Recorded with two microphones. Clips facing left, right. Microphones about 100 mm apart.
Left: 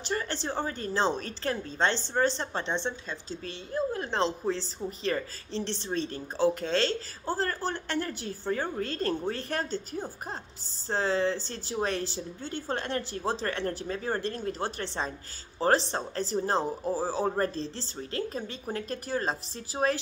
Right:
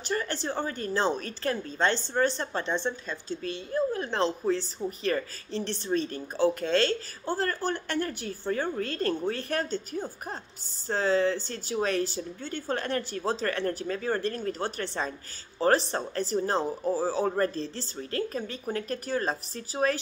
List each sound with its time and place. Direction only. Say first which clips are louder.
0.1 s a sound: right 2 dB; 25° left (ahead or behind)
0.7 s a woman's voice: even; 25° left (ahead or behind)
8.8 s a woman's voice: right 1 dB; 25° left (ahead or behind)
9.9 s a woman's voice: right 2 dB; 35° left (ahead or behind)
10.9 s a woman's voice: right 2 dB; 25° left (ahead or behind)
17.4 s a woman's voice: right 2 dB; 30° left (ahead or behind)